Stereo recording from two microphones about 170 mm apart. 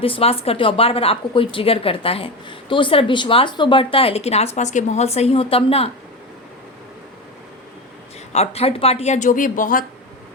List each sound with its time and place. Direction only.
0.0 s a woman's voice: 35° left (ahead or behind)
8.3 s a woman's voice: 40° left (ahead or behind)